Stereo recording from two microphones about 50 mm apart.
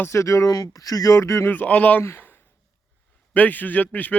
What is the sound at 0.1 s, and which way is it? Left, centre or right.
Speech, left.